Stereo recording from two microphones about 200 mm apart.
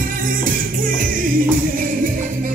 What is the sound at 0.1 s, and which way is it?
Music, 45° right (ahead or behind).